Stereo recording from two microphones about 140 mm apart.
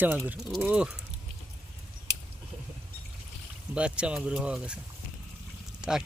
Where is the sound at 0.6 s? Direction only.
10° right (ahead or behind).